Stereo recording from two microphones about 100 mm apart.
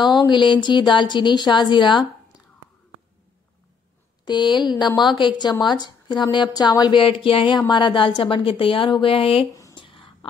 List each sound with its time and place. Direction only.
0.0 s a woman's voice: 50° left (ahead or behind)
4.2 s a woman's voice: 50° left (ahead or behind)
7.5 s a woman's voice: 45° left (ahead or behind); by 9.5 s 70° left (ahead or behind)
9.8 s whispering: 60° left (ahead or behind)